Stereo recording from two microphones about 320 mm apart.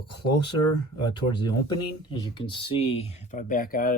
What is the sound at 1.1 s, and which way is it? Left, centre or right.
Speech, centre.